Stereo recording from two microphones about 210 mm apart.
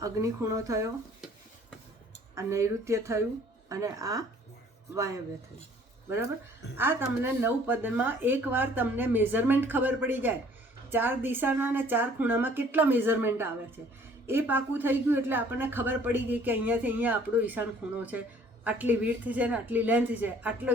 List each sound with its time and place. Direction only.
0.0 s speech: 15° right (ahead or behind)
2.3 s speech: 15° right (ahead or behind)
6.7 s speech: 10° right (ahead or behind)